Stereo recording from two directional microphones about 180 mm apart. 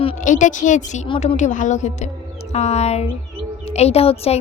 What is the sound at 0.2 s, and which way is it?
A woman's voice, 45° left (ahead or behind).